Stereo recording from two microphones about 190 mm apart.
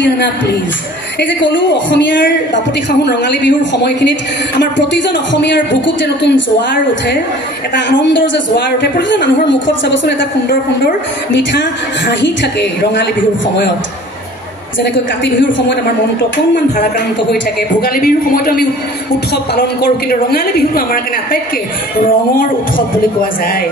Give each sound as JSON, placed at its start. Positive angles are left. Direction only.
{"t": 1.2, "sound": "a woman's voice", "side_deg": 70}
{"t": 8.8, "sound": "a woman's voice", "side_deg": 70}
{"t": 12.2, "sound": "a woman's voice", "side_deg": 70}
{"t": 14.8, "sound": "a woman's voice", "side_deg": 65}
{"t": 17.8, "sound": "a woman's voice", "side_deg": 50}